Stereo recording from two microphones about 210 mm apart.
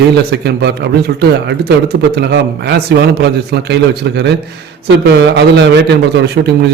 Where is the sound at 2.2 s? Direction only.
50° right (ahead or behind).